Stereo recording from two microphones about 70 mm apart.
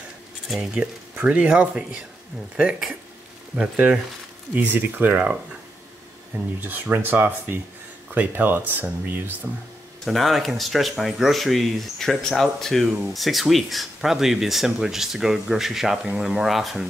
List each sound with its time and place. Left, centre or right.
0.8 s speech: centre
6.6 s speech: right
9.5 s speech: centre
10.0 s speech: centre